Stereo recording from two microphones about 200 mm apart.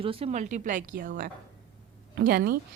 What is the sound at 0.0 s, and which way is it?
Speech, 30° right (ahead or behind).